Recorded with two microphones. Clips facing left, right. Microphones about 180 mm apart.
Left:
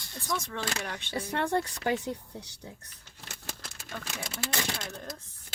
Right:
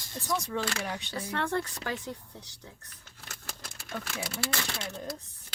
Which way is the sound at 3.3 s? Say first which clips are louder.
Left 2 dB; 20° left (ahead or behind).